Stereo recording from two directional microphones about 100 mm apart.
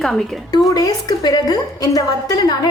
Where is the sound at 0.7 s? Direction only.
40° left (ahead or behind).